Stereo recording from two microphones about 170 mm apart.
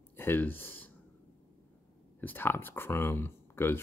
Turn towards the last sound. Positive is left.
turn(degrees=15)  # may be behind; listen again after turning